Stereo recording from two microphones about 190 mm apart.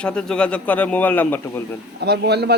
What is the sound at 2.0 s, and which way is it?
Speech, 60° right (ahead or behind).